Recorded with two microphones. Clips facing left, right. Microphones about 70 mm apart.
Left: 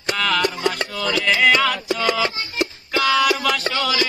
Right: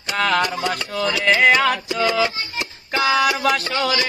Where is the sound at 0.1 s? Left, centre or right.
Right.